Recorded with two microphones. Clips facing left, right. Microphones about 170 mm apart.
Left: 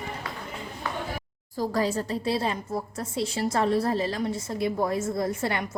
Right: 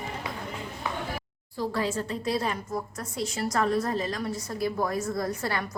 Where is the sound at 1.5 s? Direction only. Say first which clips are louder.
Left 3 dB; 40° left (ahead or behind).